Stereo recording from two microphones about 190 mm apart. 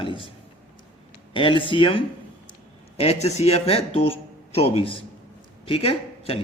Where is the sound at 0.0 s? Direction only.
25° left (ahead or behind).